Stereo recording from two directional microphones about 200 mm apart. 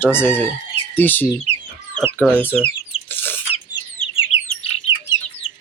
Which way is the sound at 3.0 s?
10° left (ahead or behind).